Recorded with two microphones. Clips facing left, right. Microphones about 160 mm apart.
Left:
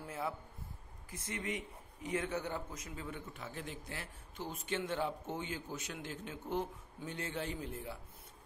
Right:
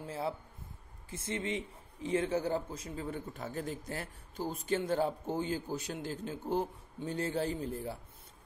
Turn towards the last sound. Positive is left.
turn(degrees=-35)  # may be behind; listen again after turning